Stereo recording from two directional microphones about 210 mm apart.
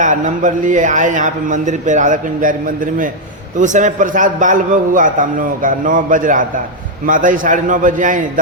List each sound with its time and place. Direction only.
0.0 s a man's voice: 35° right (ahead or behind)
3.6 s a man's voice: 35° right (ahead or behind)